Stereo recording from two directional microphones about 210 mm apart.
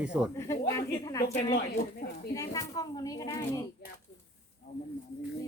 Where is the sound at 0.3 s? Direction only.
15° left (ahead or behind).